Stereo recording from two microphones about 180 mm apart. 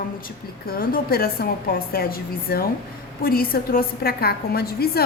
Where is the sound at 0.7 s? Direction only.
55° left (ahead or behind).